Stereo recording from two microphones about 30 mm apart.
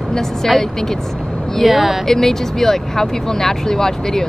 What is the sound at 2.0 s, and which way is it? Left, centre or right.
Speech, centre.